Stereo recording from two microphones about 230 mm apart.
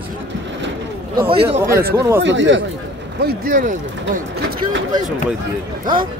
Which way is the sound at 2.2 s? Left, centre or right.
Right.